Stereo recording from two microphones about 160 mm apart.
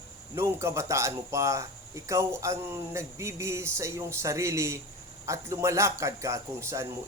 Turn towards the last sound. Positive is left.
turn(degrees=-20)  # may be behind; listen again after turning